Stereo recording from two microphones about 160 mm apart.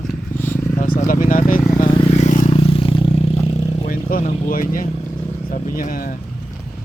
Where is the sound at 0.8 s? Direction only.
55° left (ahead or behind).